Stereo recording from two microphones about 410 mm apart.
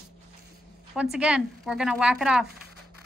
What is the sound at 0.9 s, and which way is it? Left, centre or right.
A woman's voice, centre.